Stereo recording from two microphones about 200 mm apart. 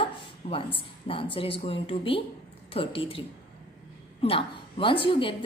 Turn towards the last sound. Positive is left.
turn(degrees=25)  # may be behind; listen again after turning